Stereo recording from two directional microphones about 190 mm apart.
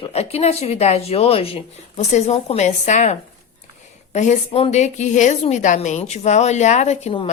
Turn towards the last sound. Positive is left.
turn(degrees=30)  # may be behind; listen again after turning